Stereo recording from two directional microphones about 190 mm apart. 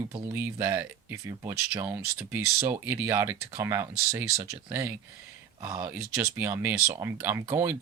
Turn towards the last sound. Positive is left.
turn(degrees=-10)  # may be behind; listen again after turning